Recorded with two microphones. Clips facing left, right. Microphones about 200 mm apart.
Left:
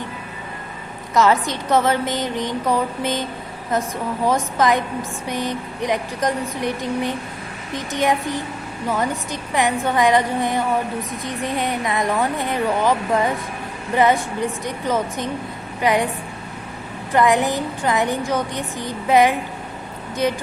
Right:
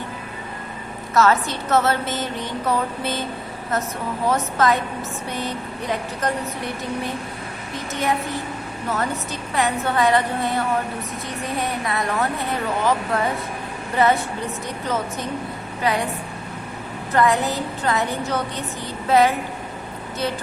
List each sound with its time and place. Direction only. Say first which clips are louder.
1.1 s a woman's voice: left 1 dB; 15° left (ahead or behind)
4.3 s a woman's voice: left 1 dB; 15° left (ahead or behind)
11.6 s a woman's voice: left 2 dB; 20° left (ahead or behind)
15.8 s a woman's voice: left 4 dB; 15° left (ahead or behind)
17.2 s a woman's voice: left 2 dB; 15° left (ahead or behind)